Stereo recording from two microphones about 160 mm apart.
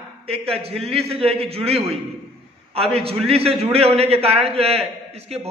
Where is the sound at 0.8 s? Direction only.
40° right (ahead or behind).